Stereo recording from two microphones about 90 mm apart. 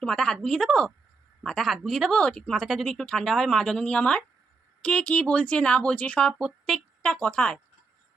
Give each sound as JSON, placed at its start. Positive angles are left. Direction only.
{"t": 0.0, "sound": "speech", "side_deg": 10}
{"t": 6.4, "sound": "speech", "side_deg": 0}